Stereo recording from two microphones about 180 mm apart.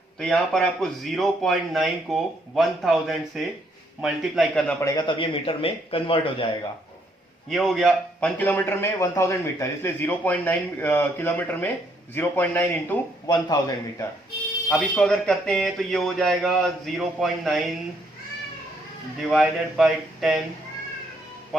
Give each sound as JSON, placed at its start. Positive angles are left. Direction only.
{"t": 0.2, "sound": "a man's voice", "side_deg": 0}
{"t": 4.8, "sound": "speech", "side_deg": 20}
{"t": 7.5, "sound": "a man's voice", "side_deg": 0}
{"t": 14.7, "sound": "a man's voice", "side_deg": 5}
{"t": 19.3, "sound": "a man's voice", "side_deg": 0}